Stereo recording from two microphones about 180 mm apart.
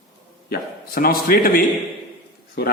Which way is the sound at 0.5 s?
55° left (ahead or behind).